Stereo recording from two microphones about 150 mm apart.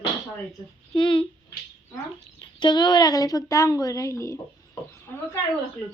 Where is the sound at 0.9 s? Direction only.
35° left (ahead or behind).